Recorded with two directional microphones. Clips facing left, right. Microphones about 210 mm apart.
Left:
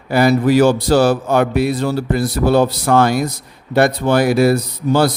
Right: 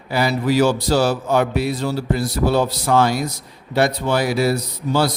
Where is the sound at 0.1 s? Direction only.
50° left (ahead or behind).